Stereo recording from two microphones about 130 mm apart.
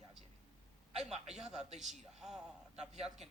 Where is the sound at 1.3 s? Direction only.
5° right (ahead or behind).